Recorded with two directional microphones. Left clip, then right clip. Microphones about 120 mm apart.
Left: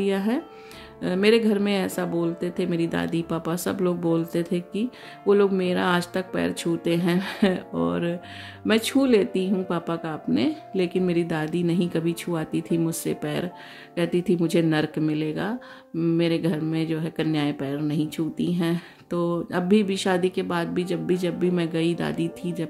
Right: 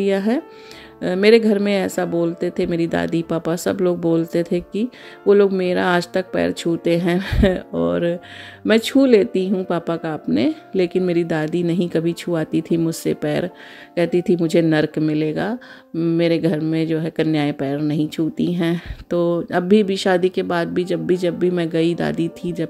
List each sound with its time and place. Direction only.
0.0 s speech: 55° right (ahead or behind)